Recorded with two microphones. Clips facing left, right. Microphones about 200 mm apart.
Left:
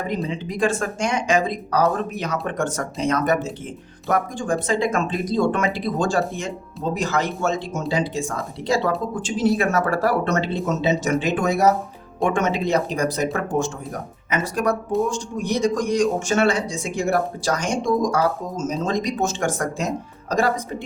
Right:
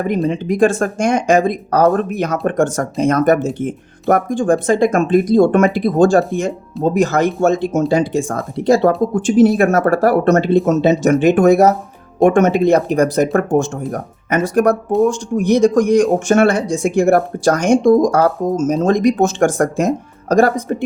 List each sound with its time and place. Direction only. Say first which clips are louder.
0.3 s speech: right 10 dB; 55° right (ahead or behind)